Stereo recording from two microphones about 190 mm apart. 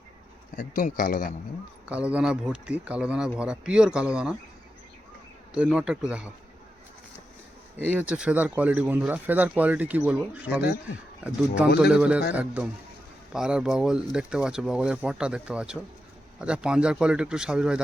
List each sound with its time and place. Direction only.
0.5 s speech: 45° left (ahead or behind)
1.9 s speech: 5° right (ahead or behind)
5.5 s speech: 5° right (ahead or behind)
7.8 s speech: 10° right (ahead or behind)